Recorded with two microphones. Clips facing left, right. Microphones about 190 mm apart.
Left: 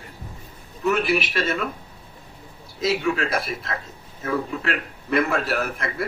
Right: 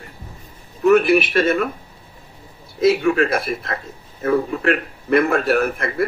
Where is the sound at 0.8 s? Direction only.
55° right (ahead or behind).